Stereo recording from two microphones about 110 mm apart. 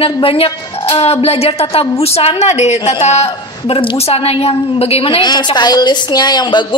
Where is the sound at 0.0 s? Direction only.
55° left (ahead or behind).